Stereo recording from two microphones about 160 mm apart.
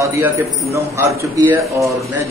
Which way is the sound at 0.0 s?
15° right (ahead or behind).